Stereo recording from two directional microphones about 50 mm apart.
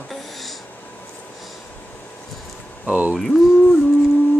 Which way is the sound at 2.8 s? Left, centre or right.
Right.